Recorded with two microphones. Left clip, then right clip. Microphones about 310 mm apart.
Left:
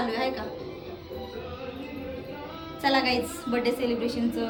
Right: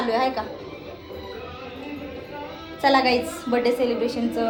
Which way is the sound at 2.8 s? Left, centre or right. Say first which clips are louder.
Right 6 dB; centre.